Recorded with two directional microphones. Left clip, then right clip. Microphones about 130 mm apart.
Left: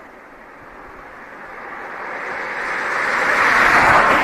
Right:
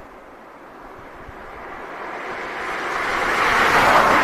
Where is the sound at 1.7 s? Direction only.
80° right.